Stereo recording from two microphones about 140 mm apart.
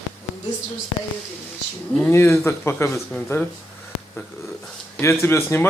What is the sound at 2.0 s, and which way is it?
Speech, 15° left (ahead or behind).